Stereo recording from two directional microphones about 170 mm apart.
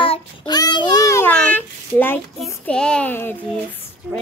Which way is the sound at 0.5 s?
25° left (ahead or behind).